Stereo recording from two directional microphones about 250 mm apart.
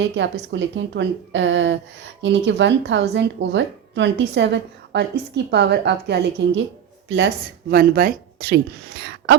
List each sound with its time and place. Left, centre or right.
0.0 s speech: right
7.7 s speech: right
9.0 s a sound: right